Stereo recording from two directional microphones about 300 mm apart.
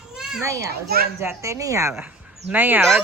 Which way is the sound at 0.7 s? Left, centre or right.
Right.